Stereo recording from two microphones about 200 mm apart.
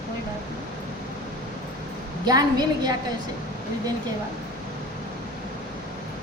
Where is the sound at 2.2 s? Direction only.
20° right (ahead or behind).